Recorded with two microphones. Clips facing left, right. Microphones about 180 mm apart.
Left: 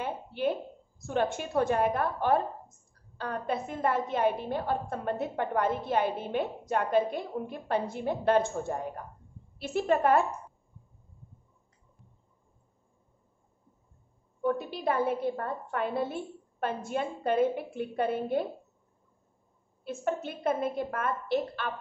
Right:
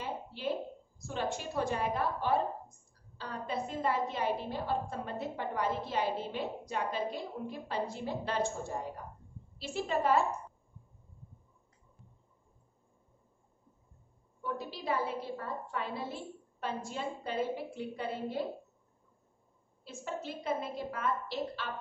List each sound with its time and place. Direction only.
0.0 s a sound: 55° left (ahead or behind)
1.0 s a woman's voice: 55° left (ahead or behind)
14.4 s a woman's voice: 55° left (ahead or behind)
19.8 s a woman's voice: 55° left (ahead or behind)